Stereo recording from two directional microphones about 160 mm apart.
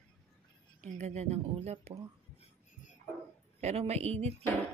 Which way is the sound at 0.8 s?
45° right (ahead or behind).